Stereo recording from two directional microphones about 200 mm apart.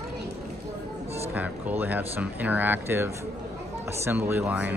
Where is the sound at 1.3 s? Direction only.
10° right (ahead or behind).